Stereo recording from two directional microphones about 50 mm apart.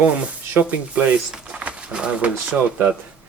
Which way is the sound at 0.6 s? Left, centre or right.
Right.